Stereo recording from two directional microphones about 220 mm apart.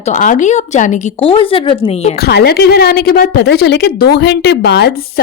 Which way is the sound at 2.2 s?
50° left (ahead or behind).